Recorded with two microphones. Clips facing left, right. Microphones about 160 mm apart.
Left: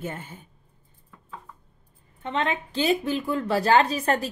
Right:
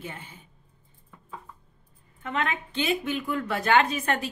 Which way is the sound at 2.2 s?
30° left (ahead or behind).